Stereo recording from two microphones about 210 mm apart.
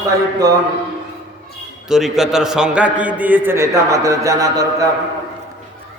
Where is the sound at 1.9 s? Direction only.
Centre (ahead or behind).